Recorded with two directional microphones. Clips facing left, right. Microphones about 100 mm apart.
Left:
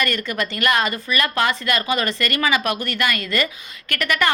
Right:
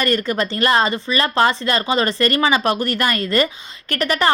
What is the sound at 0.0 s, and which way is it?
A woman's voice, 35° right (ahead or behind).